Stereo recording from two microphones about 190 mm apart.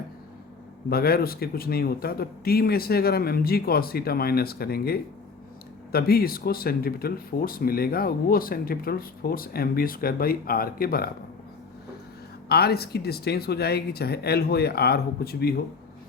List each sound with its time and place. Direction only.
0.9 s speech: 55° left (ahead or behind)
12.5 s speech: 55° left (ahead or behind)